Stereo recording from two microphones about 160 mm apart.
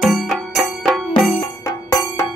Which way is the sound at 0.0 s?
Centre (ahead or behind).